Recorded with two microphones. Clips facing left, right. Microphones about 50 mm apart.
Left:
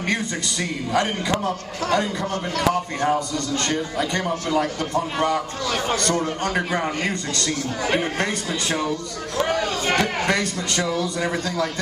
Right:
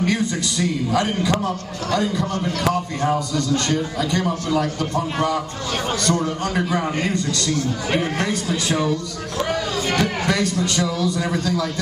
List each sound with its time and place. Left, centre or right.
0.0 s a man's voice: centre
3.0 s a man's voice: centre
6.1 s a man's voice: left
7.9 s a man's voice: centre
9.5 s a sound: centre
10.4 s a man's voice: centre